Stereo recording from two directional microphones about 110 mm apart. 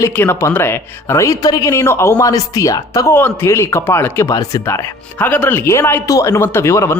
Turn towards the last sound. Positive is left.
turn(degrees=25)  # may be behind; listen again after turning